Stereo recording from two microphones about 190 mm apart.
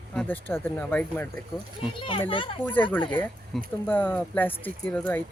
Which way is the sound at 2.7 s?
10° left (ahead or behind).